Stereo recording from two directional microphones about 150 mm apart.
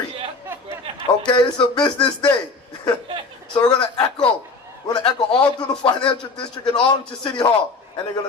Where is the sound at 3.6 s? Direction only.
30° left (ahead or behind).